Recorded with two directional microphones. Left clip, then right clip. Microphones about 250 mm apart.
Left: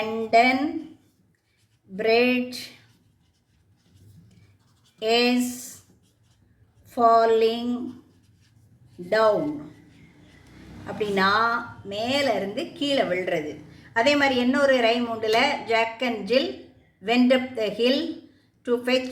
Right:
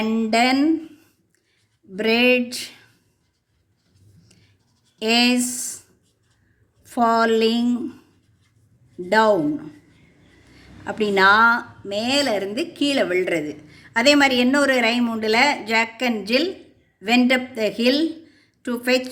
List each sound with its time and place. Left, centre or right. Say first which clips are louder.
0.0 s a woman's voice: even; right
2.0 s a woman's voice: right 3 dB; right
4.9 s a woman's voice: right 3 dB; right
6.9 s a woman's voice: even; right
9.0 s a woman's voice: right 3 dB; right
10.8 s a woman's voice: right 7 dB; right